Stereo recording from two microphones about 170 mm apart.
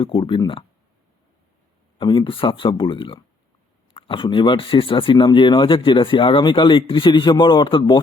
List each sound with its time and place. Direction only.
0.0 s speech: 30° left (ahead or behind)
2.0 s speech: 30° left (ahead or behind)